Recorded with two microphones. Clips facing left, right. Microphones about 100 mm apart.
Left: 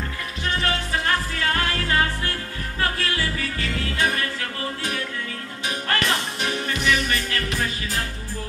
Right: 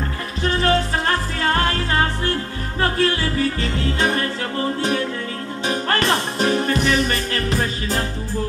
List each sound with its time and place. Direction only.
0.4 s music: 35° right (ahead or behind)
5.7 s music: 35° right (ahead or behind)